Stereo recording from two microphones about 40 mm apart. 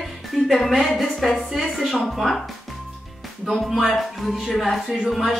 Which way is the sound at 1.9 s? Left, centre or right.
Centre.